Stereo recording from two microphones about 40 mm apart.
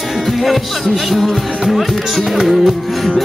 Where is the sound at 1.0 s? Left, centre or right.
Centre.